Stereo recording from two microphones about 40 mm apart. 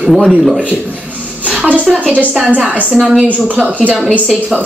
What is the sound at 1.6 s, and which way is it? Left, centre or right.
Speech, right.